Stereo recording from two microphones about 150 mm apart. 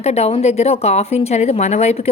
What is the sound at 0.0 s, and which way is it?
A woman's voice, 45° left (ahead or behind).